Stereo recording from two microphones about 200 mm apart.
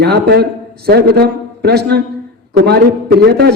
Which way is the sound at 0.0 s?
55° right (ahead or behind).